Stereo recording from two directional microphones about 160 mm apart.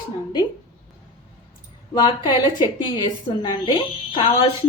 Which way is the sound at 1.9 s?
25° left (ahead or behind).